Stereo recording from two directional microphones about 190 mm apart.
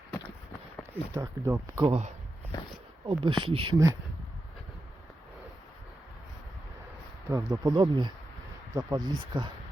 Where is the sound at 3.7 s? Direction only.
15° right (ahead or behind).